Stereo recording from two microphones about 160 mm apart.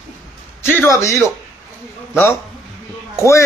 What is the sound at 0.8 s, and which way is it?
Speech, 20° left (ahead or behind).